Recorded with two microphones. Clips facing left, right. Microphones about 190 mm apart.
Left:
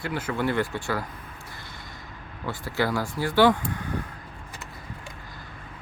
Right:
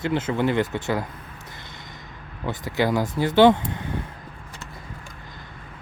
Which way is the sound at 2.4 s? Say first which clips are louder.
Right 3 dB; 20° right (ahead or behind).